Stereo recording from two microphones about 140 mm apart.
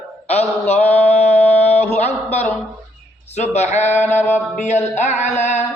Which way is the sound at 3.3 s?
55° left (ahead or behind).